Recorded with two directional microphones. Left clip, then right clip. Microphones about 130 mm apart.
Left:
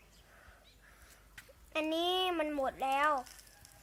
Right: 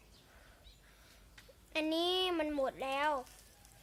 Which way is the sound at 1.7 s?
20° right (ahead or behind).